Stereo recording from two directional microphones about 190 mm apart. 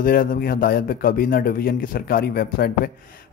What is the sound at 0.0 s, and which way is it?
Speech, 50° left (ahead or behind).